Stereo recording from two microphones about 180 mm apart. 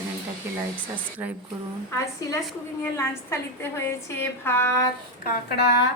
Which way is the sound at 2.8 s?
15° left (ahead or behind).